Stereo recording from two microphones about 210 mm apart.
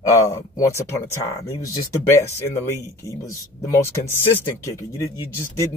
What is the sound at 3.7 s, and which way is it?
Speech, 15° left (ahead or behind).